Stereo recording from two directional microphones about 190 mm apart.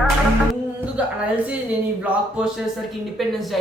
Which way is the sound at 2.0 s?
5° right (ahead or behind).